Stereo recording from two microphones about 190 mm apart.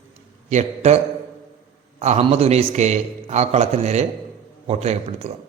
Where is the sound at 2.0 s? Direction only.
35° right (ahead or behind).